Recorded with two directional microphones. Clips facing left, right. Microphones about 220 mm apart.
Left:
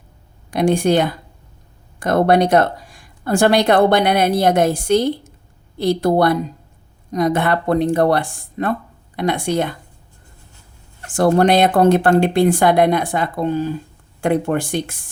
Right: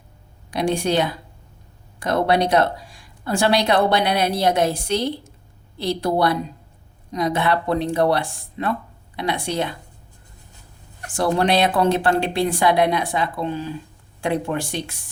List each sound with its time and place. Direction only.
0.5 s speech: 50° left (ahead or behind)
11.1 s speech: 50° left (ahead or behind)